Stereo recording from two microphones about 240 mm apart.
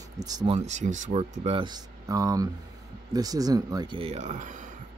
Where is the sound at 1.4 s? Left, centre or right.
Right.